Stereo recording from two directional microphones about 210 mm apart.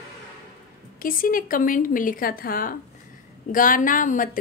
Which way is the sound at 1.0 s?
40° left (ahead or behind).